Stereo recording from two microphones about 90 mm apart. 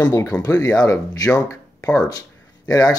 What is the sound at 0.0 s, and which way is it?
Speech, 40° left (ahead or behind).